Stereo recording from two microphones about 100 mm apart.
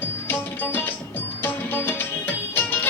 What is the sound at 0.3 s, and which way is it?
Music, 20° left (ahead or behind).